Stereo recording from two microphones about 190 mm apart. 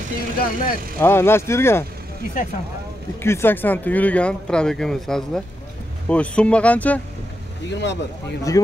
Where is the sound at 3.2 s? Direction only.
10° left (ahead or behind).